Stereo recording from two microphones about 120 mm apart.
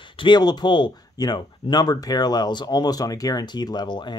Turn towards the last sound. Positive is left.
turn(degrees=40)  # may be behind; listen again after turning